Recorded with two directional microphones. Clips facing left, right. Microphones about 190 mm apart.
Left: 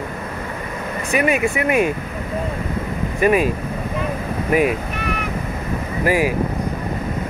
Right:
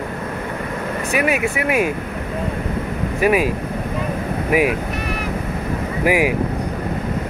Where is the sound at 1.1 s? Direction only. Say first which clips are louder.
Left 2 dB; 5° right (ahead or behind).